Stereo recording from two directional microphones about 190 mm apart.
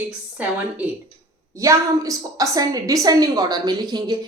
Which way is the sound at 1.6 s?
15° right (ahead or behind).